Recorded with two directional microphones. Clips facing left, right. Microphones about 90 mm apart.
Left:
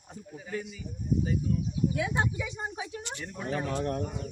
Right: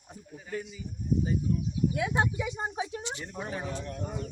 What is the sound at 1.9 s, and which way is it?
Speech, 10° right (ahead or behind).